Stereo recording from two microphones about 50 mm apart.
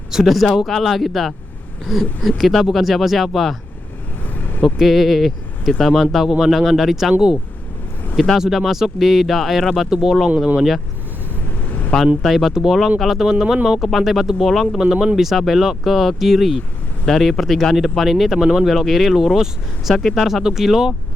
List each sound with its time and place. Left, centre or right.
0.1 s speech: centre
2.7 s speech: centre
4.8 s speech: centre
7.1 s speech: centre
8.1 s speech: centre
10.2 s speech: right
12.2 s speech: centre
14.8 s speech: centre
15.1 s speech: centre
18.4 s speech: centre
18.7 s speech: centre